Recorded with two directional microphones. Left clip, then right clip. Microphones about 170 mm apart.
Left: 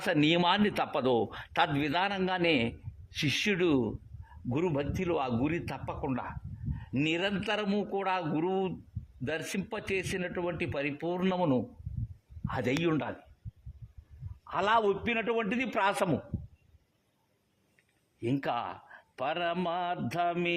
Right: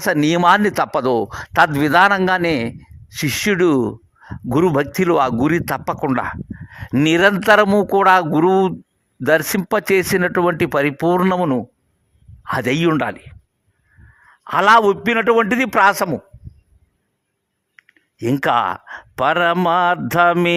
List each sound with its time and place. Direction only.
0.0 s a man's voice: 40° right (ahead or behind)
4.4 s speech: 55° right (ahead or behind)
11.2 s a man's voice: 40° right (ahead or behind)
12.5 s a man's voice: 50° right (ahead or behind)
14.4 s speech: 45° right (ahead or behind)
18.2 s a man's voice: 50° right (ahead or behind)